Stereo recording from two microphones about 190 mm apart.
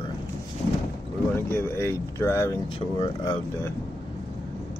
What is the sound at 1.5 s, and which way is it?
Speech, 15° left (ahead or behind).